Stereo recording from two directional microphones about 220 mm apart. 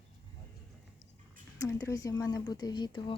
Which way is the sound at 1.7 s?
15° left (ahead or behind).